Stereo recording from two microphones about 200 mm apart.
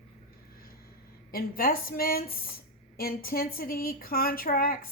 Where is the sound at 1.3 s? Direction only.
45° left (ahead or behind).